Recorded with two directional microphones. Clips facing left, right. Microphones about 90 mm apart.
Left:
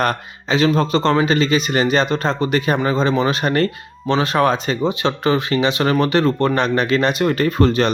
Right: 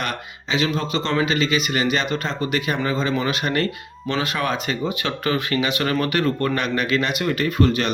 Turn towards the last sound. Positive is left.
turn(degrees=35)  # may be behind; listen again after turning